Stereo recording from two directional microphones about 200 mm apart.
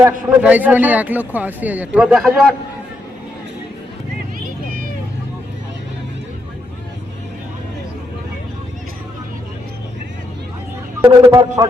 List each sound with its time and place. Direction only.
0.0 s a man's voice: 10° right (ahead or behind)
4.4 s vehicle: 45° right (ahead or behind)
11.2 s speech: 20° right (ahead or behind)